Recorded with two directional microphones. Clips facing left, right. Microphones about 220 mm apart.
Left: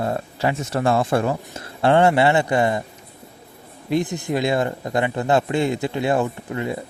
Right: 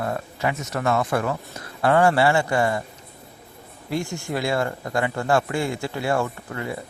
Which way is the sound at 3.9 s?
20° left (ahead or behind).